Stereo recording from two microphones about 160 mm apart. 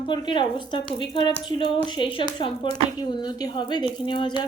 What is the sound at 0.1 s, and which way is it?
A woman's voice, 30° left (ahead or behind).